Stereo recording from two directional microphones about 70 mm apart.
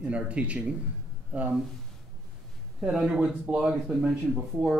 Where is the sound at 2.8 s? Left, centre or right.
Centre.